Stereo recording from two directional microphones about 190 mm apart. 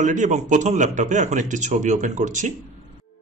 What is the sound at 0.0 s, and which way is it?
Speech, 40° right (ahead or behind).